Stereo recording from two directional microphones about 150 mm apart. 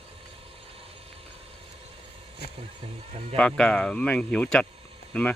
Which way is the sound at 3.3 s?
5° left (ahead or behind).